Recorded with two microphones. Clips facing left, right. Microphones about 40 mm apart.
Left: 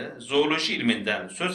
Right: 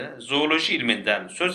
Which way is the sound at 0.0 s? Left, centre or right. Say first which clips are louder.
Even; right.